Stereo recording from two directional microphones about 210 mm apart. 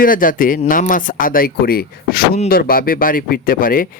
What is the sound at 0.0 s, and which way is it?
Speech, 40° left (ahead or behind).